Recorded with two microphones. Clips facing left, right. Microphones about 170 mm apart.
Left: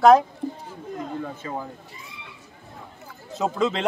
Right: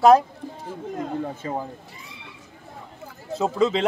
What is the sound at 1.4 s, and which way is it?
Speech, 25° right (ahead or behind).